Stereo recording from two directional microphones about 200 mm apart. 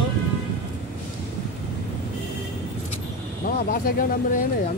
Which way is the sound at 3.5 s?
45° left (ahead or behind).